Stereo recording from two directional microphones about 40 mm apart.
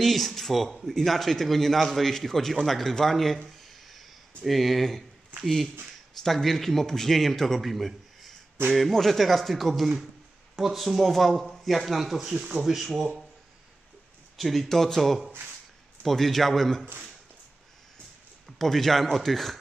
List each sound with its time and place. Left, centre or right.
0.0 s a man's voice: centre
3.6 s a sound: centre
4.5 s a man's voice: centre
8.6 s speech: right
8.9 s a man's voice: centre
12.3 s speech: centre
12.6 s a man's voice: centre
14.3 s a man's voice: centre
18.6 s a man's voice: centre